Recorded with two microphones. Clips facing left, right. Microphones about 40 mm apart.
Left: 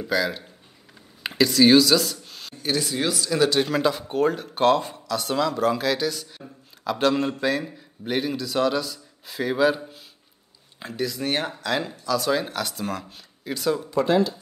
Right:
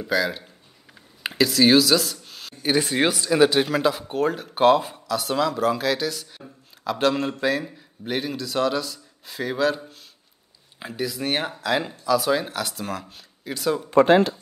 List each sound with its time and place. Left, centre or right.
0.0 s speech: centre
1.2 s a sound: centre
2.8 s speech: right
3.2 s speech: centre
3.6 s speech: centre
10.8 s speech: centre
13.8 s speech: right